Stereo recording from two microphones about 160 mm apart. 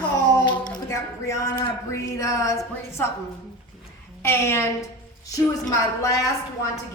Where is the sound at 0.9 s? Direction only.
20° left (ahead or behind).